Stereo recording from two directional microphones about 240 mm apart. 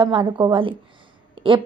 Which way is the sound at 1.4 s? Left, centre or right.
Right.